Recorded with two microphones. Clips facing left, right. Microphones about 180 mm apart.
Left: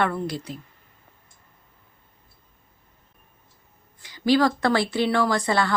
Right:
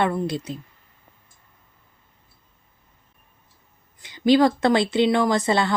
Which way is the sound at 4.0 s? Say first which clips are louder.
Right 3 dB; 20° right (ahead or behind).